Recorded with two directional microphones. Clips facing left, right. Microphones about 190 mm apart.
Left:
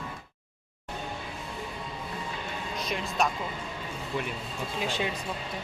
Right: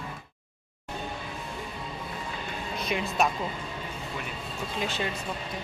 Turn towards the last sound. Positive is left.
turn(degrees=15)  # may be behind; listen again after turning